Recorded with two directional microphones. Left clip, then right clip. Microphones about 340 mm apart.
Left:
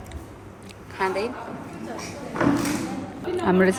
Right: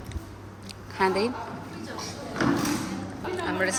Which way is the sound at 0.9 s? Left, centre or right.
Centre.